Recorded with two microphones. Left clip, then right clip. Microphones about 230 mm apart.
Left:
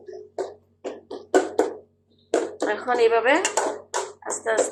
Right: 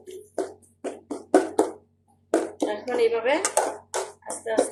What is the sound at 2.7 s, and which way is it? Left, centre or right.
Speech, centre.